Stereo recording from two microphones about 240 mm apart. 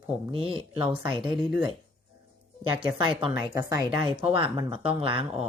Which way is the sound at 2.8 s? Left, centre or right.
Right.